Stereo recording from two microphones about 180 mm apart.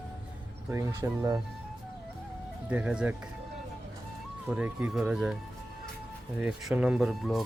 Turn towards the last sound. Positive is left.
turn(degrees=0)  # may be behind; listen again after turning